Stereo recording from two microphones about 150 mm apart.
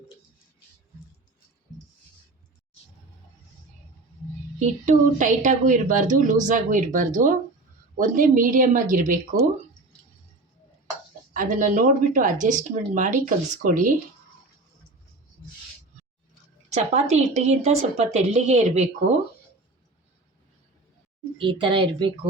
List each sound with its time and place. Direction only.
4.6 s a woman's voice: 55° right (ahead or behind)
11.3 s a woman's voice: 60° right (ahead or behind)
16.7 s a woman's voice: 45° right (ahead or behind)
21.3 s speech: 35° right (ahead or behind)